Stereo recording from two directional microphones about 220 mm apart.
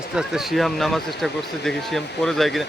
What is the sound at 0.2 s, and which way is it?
Speech, centre (ahead or behind).